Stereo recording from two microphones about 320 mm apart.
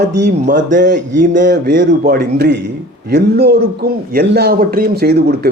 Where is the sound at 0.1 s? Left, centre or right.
Right.